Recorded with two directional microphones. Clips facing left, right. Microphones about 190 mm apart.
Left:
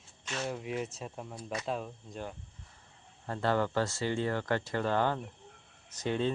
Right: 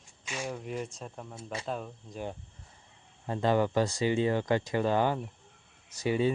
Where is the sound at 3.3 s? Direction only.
15° right (ahead or behind).